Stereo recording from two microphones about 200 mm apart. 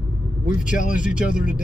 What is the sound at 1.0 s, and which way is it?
Speech, 5° right (ahead or behind).